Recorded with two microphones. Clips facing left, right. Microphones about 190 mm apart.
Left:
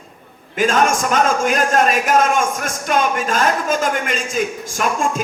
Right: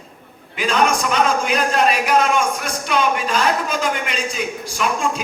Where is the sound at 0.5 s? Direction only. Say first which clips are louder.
Left 2 dB; 45° left (ahead or behind).